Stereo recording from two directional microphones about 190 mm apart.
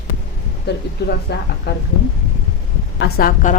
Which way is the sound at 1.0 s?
60° left (ahead or behind).